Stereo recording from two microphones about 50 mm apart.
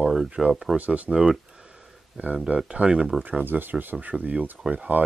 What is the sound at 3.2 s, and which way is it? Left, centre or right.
Speech, right.